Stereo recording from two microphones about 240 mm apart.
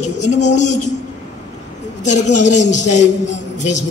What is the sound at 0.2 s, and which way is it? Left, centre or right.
Speech, left.